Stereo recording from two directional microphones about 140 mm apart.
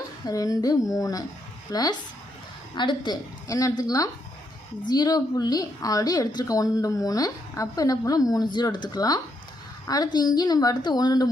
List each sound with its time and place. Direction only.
0.3 s a woman's voice: 25° left (ahead or behind)